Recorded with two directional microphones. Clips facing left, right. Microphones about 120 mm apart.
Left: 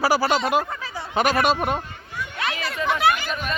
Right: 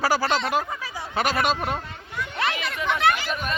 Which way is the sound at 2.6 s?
5° left (ahead or behind).